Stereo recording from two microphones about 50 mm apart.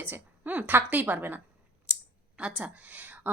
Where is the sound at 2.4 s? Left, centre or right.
Right.